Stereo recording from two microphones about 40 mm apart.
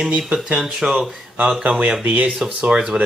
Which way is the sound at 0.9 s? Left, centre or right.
Right.